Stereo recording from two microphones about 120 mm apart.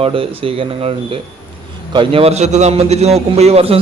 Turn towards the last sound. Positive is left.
turn(degrees=-55)  # may be behind; listen again after turning